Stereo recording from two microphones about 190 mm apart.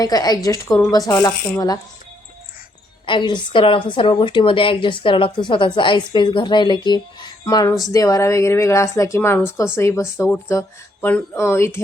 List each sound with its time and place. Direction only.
0.0 s a woman's voice: 20° left (ahead or behind)
3.1 s a woman's voice: 25° left (ahead or behind)